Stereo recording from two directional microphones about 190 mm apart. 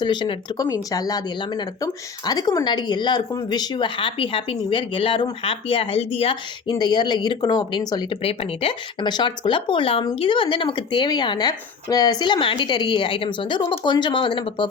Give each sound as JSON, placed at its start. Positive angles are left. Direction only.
{"t": 0.0, "sound": "a woman's voice", "side_deg": 25}